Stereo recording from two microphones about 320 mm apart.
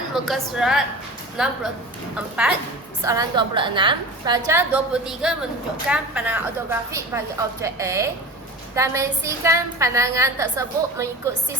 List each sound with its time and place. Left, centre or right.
0.1 s a woman's voice: centre